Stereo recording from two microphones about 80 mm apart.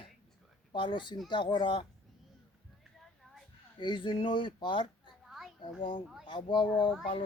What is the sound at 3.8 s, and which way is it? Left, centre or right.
Speech, left.